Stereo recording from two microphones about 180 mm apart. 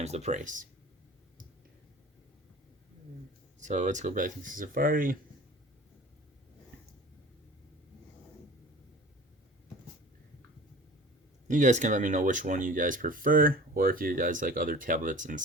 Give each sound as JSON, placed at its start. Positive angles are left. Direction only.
{"t": 0.0, "sound": "speech", "side_deg": -40}
{"t": 3.6, "sound": "speech", "side_deg": -40}
{"t": 11.4, "sound": "speech", "side_deg": -45}